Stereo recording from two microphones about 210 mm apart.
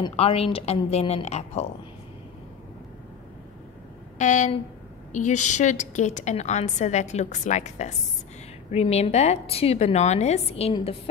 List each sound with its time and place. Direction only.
0.0 s a woman's voice: 25° left (ahead or behind)
4.2 s a woman's voice: 35° left (ahead or behind)